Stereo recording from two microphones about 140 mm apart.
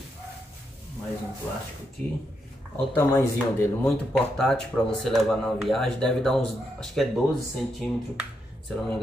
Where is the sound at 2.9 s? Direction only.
15° left (ahead or behind).